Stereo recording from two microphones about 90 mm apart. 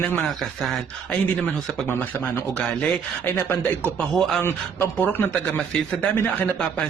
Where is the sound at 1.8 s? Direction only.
20° left (ahead or behind).